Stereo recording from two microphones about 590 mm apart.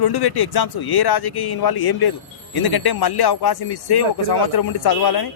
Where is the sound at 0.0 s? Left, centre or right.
Left.